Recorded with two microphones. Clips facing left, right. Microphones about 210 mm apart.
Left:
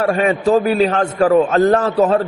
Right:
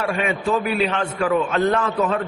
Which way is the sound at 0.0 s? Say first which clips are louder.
Left 7 dB; 40° left (ahead or behind).